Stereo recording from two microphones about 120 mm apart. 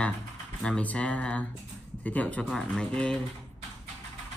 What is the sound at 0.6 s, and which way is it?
Speech, 10° left (ahead or behind).